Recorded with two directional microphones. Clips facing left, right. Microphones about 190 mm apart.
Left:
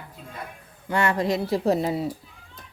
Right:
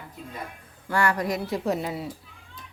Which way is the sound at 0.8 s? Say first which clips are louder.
Left 2 dB; 20° left (ahead or behind).